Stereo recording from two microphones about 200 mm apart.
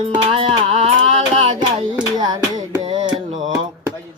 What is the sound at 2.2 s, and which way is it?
Music, 20° right (ahead or behind).